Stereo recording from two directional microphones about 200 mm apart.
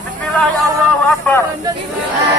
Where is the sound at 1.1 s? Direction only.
5° left (ahead or behind).